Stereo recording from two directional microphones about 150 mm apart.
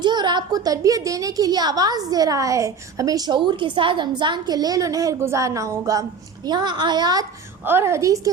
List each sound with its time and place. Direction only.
0.0 s a woman's voice: 30° right (ahead or behind)
7.6 s a woman's voice: 15° right (ahead or behind)